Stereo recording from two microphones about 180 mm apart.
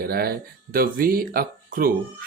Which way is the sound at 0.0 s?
55° right (ahead or behind).